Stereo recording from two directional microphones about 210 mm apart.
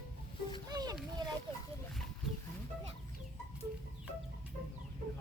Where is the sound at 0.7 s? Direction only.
20° right (ahead or behind).